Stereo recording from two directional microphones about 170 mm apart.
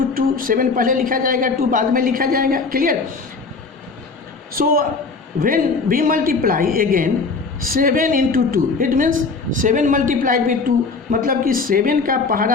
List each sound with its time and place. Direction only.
0.1 s a man's voice: 55° right (ahead or behind)
4.5 s a man's voice: 60° right (ahead or behind)